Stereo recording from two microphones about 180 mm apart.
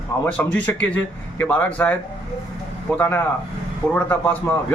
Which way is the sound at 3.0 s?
10° left (ahead or behind).